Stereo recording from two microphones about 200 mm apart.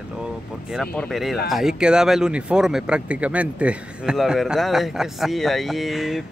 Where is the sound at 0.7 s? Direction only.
5° left (ahead or behind).